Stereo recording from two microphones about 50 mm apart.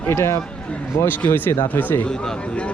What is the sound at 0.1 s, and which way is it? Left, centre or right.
Speech, left.